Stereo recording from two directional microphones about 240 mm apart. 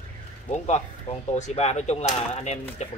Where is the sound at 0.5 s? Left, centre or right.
Left.